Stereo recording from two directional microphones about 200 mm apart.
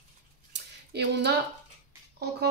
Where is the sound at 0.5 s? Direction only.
60° right (ahead or behind).